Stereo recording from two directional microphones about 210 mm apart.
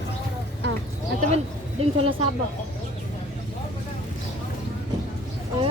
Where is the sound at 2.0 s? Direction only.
25° right (ahead or behind).